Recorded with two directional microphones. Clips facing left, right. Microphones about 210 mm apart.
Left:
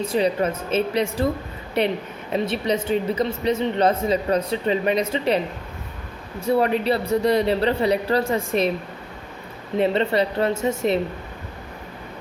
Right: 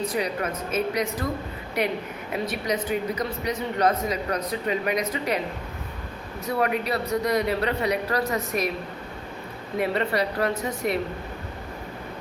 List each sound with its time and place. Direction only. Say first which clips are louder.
0.0 s speech: left 6 dB; 25° left (ahead or behind)
6.4 s speech: left 5 dB; 30° left (ahead or behind)
9.7 s speech: left 5 dB; 25° left (ahead or behind)